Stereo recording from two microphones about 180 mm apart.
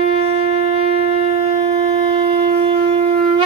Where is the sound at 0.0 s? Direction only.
30° right (ahead or behind).